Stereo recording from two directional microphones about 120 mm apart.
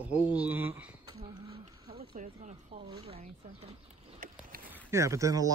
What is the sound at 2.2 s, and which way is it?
Speech, 90° right.